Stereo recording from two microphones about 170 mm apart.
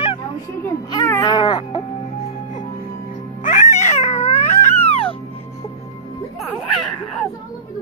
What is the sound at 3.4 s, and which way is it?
Cat, 45° left (ahead or behind).